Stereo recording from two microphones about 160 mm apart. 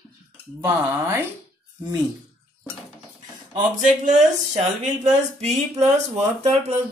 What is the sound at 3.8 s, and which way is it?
Speech, 50° right (ahead or behind).